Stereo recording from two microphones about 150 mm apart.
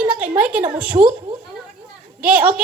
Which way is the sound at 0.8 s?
10° right (ahead or behind).